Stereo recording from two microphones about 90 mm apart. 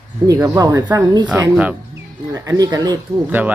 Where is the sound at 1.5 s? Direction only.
10° right (ahead or behind).